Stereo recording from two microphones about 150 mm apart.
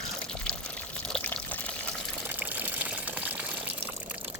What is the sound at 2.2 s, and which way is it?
Water, 10° right (ahead or behind).